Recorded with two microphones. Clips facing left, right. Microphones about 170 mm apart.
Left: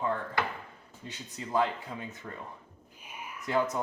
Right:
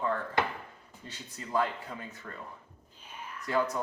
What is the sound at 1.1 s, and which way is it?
Speech, 15° left (ahead or behind).